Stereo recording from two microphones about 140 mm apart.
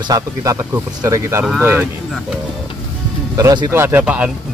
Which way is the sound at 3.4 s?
25° right (ahead or behind).